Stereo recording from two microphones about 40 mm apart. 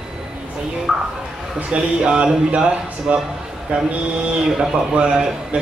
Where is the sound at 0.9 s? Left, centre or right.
Centre.